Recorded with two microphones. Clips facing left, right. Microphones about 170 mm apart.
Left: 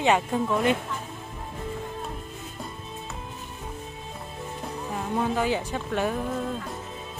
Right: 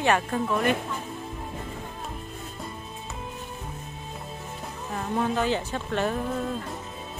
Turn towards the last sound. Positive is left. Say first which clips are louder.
# even
turn(degrees=5)  # may be behind; listen again after turning